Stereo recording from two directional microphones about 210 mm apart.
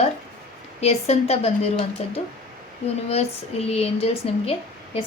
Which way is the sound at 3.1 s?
30° left (ahead or behind).